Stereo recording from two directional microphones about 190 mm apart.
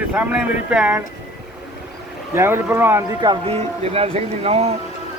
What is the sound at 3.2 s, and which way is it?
Speech, 25° right (ahead or behind).